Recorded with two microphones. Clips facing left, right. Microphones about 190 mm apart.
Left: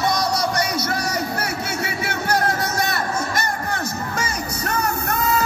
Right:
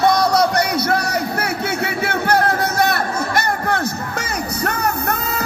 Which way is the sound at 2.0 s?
60° right (ahead or behind).